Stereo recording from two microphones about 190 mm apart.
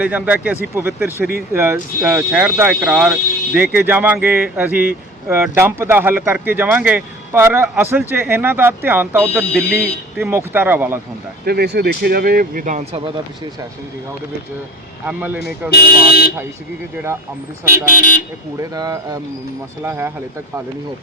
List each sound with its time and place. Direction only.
0.0 s speech: 10° right (ahead or behind)
9.6 s speech: 55° left (ahead or behind)
10.2 s speech: 10° right (ahead or behind)
11.4 s speech: 55° right (ahead or behind); by 13.0 s 40° right (ahead or behind)
15.0 s speech: 10° right (ahead or behind)
15.7 s speech: 55° left (ahead or behind)
17.8 s speech: 45° left (ahead or behind)
18.7 s speech: 20° right (ahead or behind)